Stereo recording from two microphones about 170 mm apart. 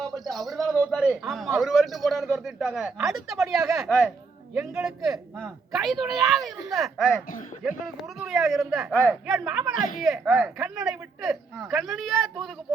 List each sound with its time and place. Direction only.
0.0 s speech: centre (ahead or behind)
8.2 s speech: centre (ahead or behind)
9.2 s speech: 5° right (ahead or behind)
9.7 s speech: 50° left (ahead or behind)
10.0 s speech: centre (ahead or behind)